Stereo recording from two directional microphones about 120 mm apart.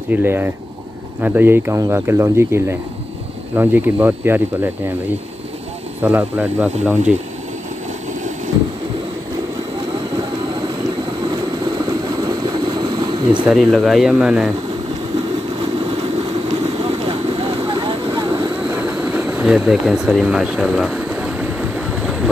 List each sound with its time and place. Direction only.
0.1 s speech: 15° right (ahead or behind)
6.0 s speech: 15° right (ahead or behind)
11.6 s a sound: 35° right (ahead or behind)
13.5 s speech: centre (ahead or behind)
16.4 s vehicle: 50° right (ahead or behind)
18.8 s speech: 15° right (ahead or behind)
21.1 s boat: 10° right (ahead or behind)